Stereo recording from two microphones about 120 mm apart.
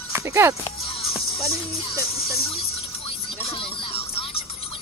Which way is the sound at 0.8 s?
50° left (ahead or behind).